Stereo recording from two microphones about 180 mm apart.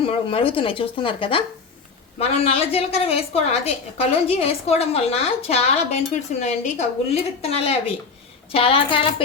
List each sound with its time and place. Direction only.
0.0 s a woman's voice: 30° left (ahead or behind)